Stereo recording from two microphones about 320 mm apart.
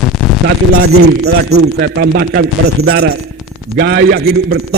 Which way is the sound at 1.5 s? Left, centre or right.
Right.